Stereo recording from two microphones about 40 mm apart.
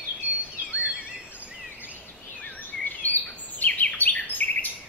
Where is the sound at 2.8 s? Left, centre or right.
Left.